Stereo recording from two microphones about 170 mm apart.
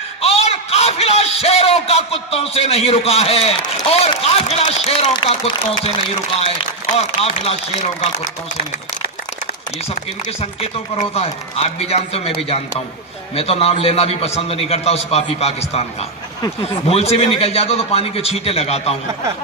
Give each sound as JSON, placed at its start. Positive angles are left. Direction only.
{"t": 0.2, "sound": "a man's voice", "side_deg": 35}
{"t": 7.0, "sound": "a man's voice", "side_deg": 35}
{"t": 10.4, "sound": "a man's voice", "side_deg": 35}
{"t": 16.8, "sound": "a man's voice", "side_deg": 40}